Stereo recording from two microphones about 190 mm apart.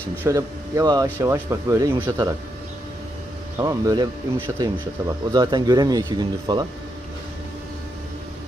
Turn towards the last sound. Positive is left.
turn(degrees=-25)  # may be behind; listen again after turning